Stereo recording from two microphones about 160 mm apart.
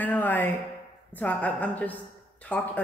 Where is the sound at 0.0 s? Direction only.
10° left (ahead or behind).